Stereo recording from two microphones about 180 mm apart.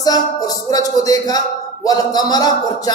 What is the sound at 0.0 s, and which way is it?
Speech, 20° left (ahead or behind).